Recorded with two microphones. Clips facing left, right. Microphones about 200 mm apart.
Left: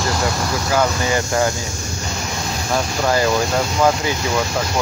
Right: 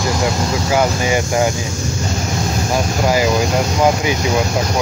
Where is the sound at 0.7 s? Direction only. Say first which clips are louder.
Right 2 dB; 15° right (ahead or behind).